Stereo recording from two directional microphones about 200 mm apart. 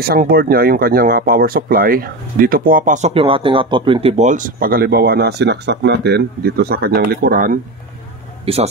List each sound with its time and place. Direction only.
0.0 s speech: 50° right (ahead or behind)
8.5 s speech: 30° right (ahead or behind)